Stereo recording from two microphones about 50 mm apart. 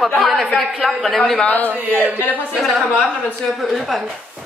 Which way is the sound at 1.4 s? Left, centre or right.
Left.